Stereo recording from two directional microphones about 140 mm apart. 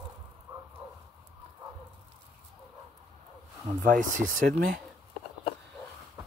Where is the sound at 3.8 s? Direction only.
70° right (ahead or behind).